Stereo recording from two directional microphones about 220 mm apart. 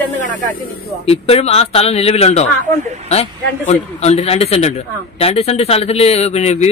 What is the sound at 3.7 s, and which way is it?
A man's voice, 30° left (ahead or behind).